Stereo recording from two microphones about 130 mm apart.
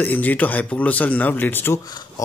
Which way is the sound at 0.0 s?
15° left (ahead or behind).